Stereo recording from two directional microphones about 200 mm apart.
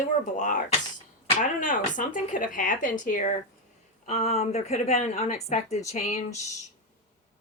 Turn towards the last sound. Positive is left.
turn(degrees=35)  # may be behind; listen again after turning